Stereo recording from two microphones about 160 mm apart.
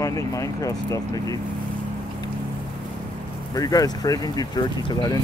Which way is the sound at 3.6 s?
20° left (ahead or behind).